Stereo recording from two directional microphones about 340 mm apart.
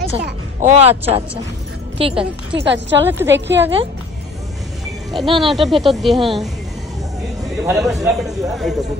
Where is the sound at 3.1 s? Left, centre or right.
Centre.